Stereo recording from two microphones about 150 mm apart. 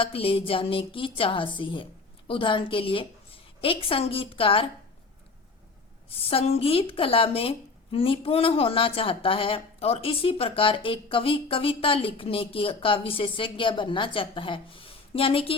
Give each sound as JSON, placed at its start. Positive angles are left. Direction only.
{"t": 0.0, "sound": "speech", "side_deg": 40}
{"t": 6.1, "sound": "speech", "side_deg": 40}